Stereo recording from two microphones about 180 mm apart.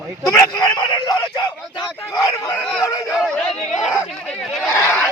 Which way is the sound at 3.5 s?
40° left (ahead or behind).